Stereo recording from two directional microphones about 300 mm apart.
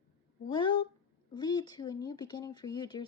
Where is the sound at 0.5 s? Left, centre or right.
Centre.